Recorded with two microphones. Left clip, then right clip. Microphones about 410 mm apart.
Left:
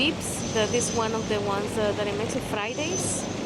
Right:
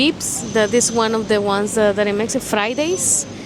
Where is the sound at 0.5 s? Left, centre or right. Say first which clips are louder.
Right 9 dB; right.